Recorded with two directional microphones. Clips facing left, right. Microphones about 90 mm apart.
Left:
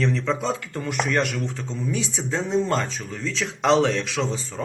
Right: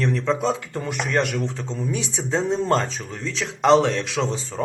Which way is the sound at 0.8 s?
25° right (ahead or behind).